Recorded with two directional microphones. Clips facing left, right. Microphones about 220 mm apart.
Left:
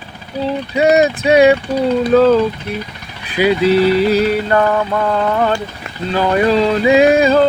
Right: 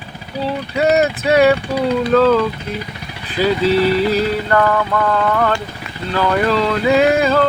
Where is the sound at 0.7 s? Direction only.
15° left (ahead or behind).